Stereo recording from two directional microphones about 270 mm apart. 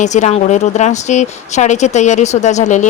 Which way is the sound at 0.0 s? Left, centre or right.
Left.